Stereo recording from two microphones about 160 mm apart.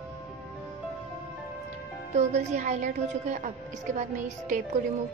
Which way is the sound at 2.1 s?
45° right (ahead or behind).